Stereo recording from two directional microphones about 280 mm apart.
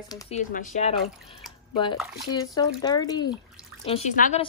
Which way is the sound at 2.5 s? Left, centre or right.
Centre.